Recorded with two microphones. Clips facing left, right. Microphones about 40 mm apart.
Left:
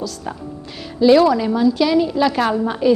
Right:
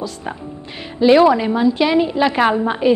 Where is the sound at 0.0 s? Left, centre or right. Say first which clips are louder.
Right 1 dB; right.